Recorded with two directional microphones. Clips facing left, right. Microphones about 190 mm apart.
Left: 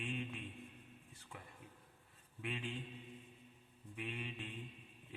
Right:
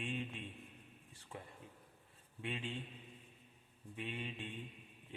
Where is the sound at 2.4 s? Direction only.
25° right (ahead or behind).